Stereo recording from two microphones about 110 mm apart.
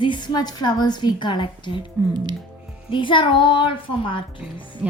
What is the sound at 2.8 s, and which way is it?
A woman's voice, 50° left (ahead or behind).